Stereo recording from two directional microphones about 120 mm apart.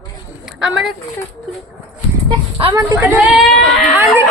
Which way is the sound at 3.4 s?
Centre (ahead or behind).